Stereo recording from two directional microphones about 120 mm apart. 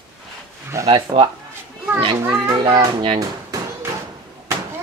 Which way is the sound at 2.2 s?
20° right (ahead or behind).